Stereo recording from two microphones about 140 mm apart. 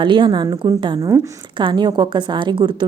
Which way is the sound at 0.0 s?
35° right (ahead or behind).